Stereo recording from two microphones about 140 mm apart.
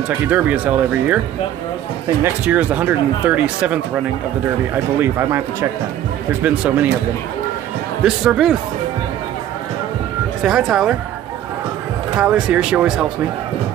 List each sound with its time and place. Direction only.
0.3 s speech: 10° right (ahead or behind)
2.2 s speech: 10° right (ahead or behind)
5.0 s speech: 20° right (ahead or behind)
8.0 s speech: 5° right (ahead or behind)
10.4 s speech: 5° right (ahead or behind)
12.2 s speech: 5° right (ahead or behind)